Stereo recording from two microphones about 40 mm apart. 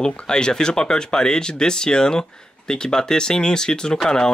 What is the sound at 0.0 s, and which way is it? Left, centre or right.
Speech, centre.